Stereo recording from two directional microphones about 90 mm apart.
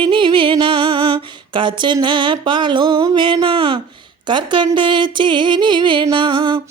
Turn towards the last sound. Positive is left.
turn(degrees=-65)  # may be behind; listen again after turning